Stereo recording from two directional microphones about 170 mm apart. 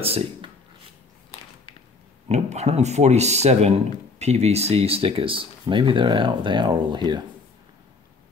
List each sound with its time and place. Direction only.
0.0 s speech: 35° right (ahead or behind)
2.2 s speech: 40° right (ahead or behind)